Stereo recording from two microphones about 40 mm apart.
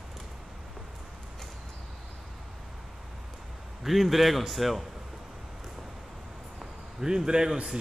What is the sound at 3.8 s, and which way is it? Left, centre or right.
Speech, centre.